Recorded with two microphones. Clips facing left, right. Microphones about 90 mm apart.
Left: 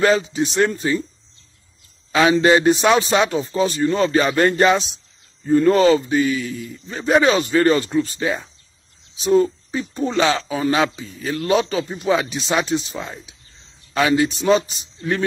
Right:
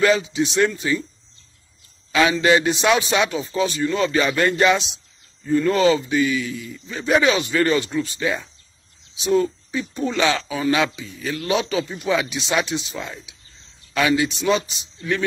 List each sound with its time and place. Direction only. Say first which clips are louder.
0.0 s a man's voice: left 1 dB; 40° left (ahead or behind)
2.1 s a man's voice: left 2 dB; 35° left (ahead or behind)